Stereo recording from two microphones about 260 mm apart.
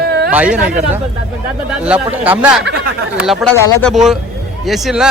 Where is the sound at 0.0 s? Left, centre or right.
Right.